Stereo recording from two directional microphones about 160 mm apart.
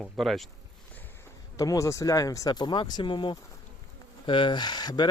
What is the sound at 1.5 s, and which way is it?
Speech, 20° left (ahead or behind).